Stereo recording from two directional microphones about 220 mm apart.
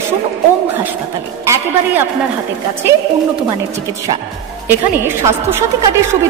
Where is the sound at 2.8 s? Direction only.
10° right (ahead or behind).